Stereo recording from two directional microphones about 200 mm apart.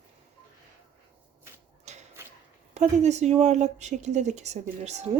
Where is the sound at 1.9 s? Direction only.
35° right (ahead or behind).